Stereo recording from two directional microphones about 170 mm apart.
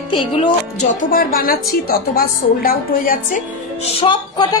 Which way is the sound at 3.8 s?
30° left (ahead or behind).